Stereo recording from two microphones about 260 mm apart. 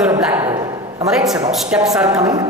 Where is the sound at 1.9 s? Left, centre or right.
Centre.